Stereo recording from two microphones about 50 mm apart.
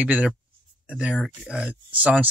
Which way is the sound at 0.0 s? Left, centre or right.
Right.